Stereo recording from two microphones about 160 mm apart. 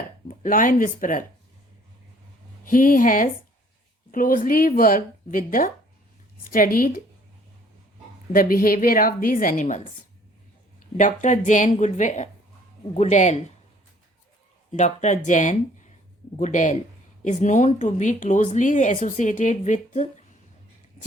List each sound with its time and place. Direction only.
0.3 s speech: 60° left (ahead or behind)
2.6 s speech: 60° left (ahead or behind)
8.3 s speech: 65° left (ahead or behind)
14.7 s speech: 45° left (ahead or behind)